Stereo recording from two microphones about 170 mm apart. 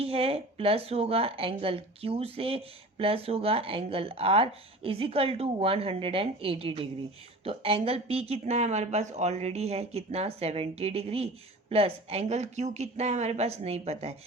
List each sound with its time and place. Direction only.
0.0 s speech: 35° right (ahead or behind)